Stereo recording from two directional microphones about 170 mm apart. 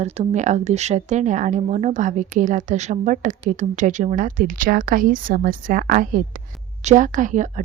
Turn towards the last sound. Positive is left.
turn(degrees=-45)  # may be behind; listen again after turning